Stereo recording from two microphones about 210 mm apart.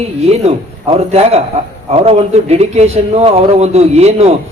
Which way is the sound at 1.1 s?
30° right (ahead or behind).